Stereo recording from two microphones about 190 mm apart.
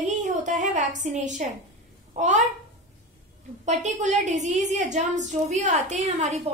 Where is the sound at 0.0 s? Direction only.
40° right (ahead or behind).